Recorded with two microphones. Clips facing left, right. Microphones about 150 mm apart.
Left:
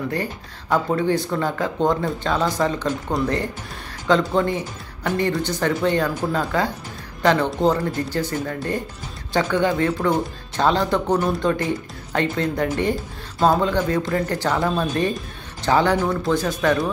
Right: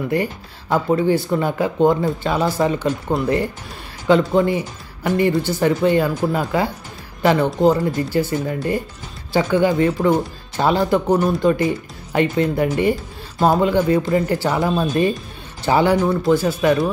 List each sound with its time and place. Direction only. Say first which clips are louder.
0.1 s speech: right 5 dB; 10° right (ahead or behind)